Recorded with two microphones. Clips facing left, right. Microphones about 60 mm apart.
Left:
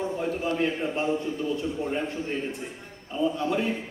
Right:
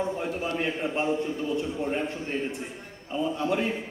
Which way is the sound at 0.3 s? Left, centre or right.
Right.